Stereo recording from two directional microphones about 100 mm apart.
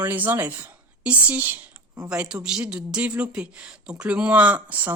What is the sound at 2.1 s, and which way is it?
Speech, 10° right (ahead or behind).